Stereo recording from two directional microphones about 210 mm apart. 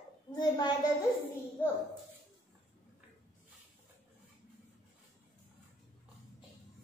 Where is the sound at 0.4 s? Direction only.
20° left (ahead or behind).